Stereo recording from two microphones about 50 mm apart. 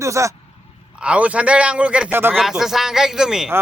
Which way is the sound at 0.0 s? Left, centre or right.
Right.